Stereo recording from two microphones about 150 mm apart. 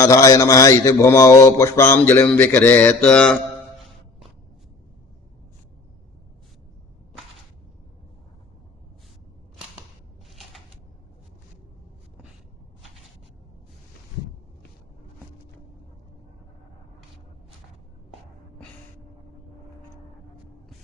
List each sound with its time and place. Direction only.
0.0 s a man's voice: 20° left (ahead or behind); by 4.3 s centre (ahead or behind)